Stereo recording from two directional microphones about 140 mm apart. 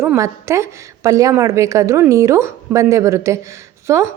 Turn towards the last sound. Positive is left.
turn(degrees=-20)  # may be behind; listen again after turning